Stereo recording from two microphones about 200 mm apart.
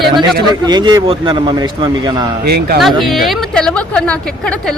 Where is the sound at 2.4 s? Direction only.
55° right (ahead or behind).